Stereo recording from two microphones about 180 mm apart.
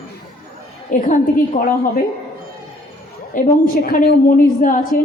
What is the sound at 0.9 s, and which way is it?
A woman's voice, 50° left (ahead or behind).